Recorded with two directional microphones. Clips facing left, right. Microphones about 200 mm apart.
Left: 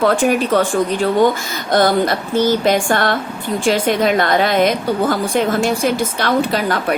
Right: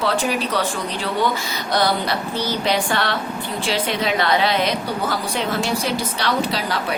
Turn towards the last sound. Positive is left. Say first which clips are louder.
# left 6 dB
turn(degrees=50)  # may be behind; listen again after turning